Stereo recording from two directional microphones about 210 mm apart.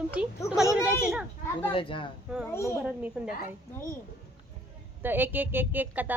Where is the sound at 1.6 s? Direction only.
25° left (ahead or behind).